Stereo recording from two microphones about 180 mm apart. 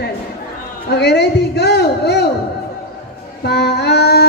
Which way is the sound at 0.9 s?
70° left (ahead or behind).